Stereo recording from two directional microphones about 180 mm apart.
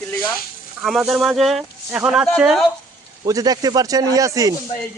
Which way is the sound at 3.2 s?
20° right (ahead or behind).